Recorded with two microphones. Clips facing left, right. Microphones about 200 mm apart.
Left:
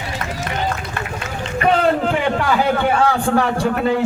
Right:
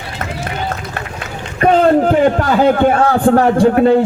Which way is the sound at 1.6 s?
45° right (ahead or behind).